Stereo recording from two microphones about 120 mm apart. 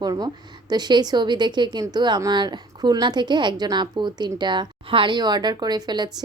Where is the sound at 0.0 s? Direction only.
35° right (ahead or behind).